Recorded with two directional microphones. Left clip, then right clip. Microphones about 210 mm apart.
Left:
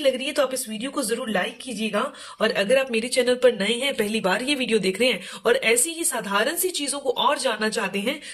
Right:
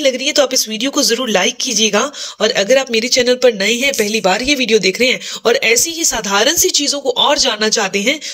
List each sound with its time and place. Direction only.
0.0 s speech: 30° right (ahead or behind)